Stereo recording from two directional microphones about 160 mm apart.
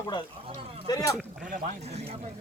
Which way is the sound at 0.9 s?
25° left (ahead or behind).